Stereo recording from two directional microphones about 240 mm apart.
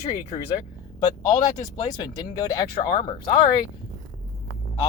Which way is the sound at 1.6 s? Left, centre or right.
Centre.